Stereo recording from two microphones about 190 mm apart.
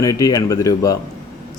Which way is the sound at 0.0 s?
20° left (ahead or behind).